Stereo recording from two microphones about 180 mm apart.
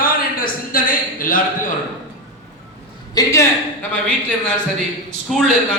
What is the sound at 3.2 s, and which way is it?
A man's voice, 20° left (ahead or behind).